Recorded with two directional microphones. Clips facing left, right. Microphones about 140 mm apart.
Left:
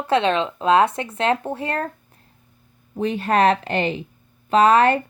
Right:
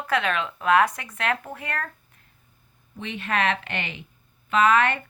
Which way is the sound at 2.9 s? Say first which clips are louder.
Left 8 dB; 40° left (ahead or behind).